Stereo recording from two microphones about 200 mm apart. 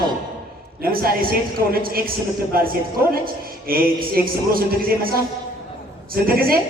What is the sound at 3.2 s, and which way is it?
A woman's voice, 45° right (ahead or behind).